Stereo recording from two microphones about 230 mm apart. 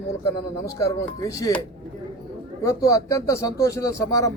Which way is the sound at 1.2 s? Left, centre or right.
Centre.